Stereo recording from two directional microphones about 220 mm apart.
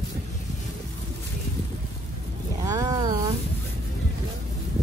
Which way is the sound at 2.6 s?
15° right (ahead or behind).